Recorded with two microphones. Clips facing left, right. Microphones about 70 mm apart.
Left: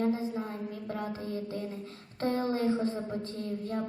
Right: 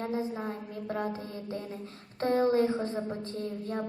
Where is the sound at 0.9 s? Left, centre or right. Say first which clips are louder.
Right 3 dB; right.